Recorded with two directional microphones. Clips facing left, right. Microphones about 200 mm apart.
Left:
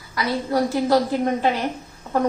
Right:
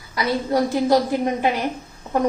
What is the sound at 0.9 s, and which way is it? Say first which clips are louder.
Speech: right 1 dB; 15° right (ahead or behind).